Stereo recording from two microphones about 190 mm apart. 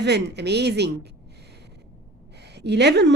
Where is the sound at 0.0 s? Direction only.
60° right (ahead or behind).